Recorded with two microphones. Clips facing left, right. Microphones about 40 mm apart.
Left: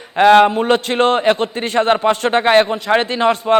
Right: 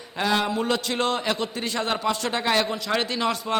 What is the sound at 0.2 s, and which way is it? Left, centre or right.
A man's voice, left.